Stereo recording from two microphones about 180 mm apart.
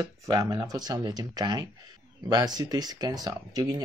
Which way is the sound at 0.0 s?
20° right (ahead or behind).